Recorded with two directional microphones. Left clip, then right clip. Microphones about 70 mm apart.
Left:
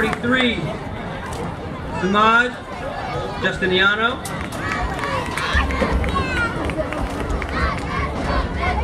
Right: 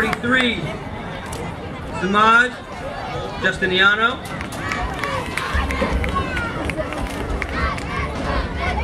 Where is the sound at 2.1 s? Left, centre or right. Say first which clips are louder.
Right 2 dB; right.